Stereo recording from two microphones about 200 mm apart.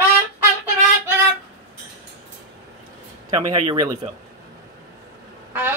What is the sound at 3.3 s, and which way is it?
Speech, 30° right (ahead or behind).